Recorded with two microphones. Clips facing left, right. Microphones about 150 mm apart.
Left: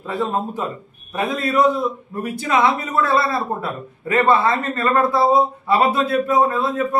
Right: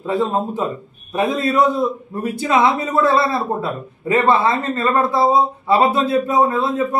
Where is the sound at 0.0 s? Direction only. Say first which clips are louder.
Right 3 dB; 20° right (ahead or behind).